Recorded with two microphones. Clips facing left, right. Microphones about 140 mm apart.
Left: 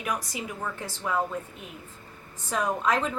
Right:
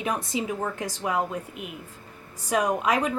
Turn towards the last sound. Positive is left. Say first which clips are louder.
# right 2 dB
turn(degrees=-10)  # may be behind; listen again after turning